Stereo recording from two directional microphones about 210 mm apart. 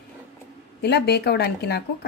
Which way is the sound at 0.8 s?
50° left (ahead or behind).